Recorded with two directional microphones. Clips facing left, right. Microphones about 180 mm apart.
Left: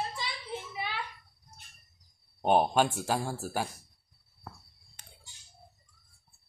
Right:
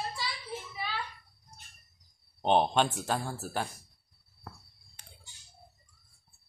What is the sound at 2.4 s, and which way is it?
Speech, 10° left (ahead or behind).